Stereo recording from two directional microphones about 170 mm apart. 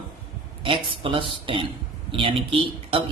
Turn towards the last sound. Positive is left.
turn(degrees=-30)  # may be behind; listen again after turning